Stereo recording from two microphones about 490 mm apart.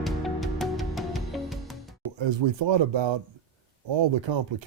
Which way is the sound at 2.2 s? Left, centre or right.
Right.